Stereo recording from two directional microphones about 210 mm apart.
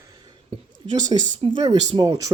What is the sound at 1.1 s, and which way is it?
Speech, 25° right (ahead or behind).